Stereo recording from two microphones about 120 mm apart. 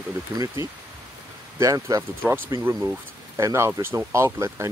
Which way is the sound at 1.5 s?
25° right (ahead or behind).